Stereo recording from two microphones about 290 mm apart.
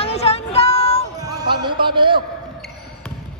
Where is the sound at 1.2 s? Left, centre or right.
Centre.